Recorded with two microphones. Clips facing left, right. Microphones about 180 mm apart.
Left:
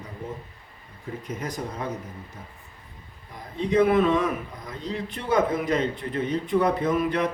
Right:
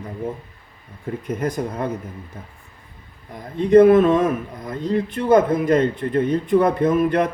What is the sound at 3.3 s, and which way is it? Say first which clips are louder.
A man's voice: right 10 dB; 50° right (ahead or behind).